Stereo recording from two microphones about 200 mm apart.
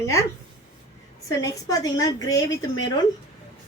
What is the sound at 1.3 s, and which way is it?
A woman's voice, 15° left (ahead or behind).